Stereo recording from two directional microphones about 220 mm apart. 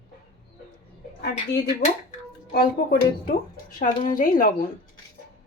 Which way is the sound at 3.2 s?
40° left (ahead or behind).